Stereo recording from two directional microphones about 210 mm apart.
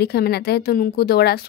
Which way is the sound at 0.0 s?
50° left (ahead or behind).